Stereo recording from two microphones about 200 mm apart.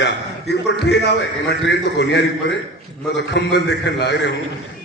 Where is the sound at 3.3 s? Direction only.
60° left (ahead or behind).